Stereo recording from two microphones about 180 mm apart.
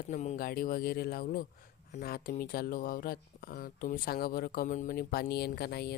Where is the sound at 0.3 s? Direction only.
55° left (ahead or behind).